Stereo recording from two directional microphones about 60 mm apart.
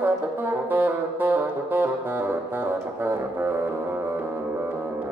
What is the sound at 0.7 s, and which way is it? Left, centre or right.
Saxophone, right.